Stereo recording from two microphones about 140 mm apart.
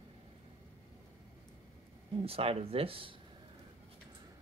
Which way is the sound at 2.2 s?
45° right (ahead or behind).